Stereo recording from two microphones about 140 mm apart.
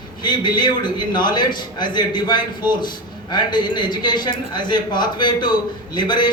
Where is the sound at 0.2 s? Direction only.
30° left (ahead or behind).